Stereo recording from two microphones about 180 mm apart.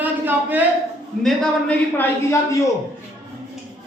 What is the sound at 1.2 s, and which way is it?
A man's voice, 5° left (ahead or behind).